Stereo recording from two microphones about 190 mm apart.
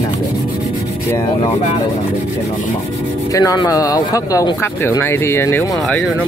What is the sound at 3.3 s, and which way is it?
Speech, 20° left (ahead or behind).